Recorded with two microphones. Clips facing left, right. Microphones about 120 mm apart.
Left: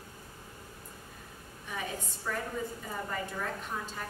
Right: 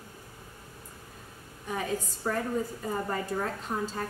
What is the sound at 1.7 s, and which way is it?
A woman's voice, 40° right (ahead or behind).